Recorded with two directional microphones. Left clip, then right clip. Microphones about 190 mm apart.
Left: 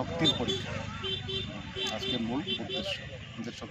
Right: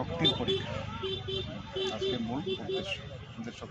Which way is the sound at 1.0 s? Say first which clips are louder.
Left 1 dB; 65° right (ahead or behind).